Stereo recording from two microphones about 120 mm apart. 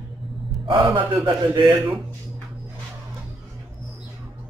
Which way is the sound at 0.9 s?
50° right (ahead or behind).